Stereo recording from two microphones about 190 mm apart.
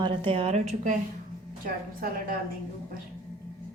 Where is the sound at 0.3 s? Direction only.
30° right (ahead or behind).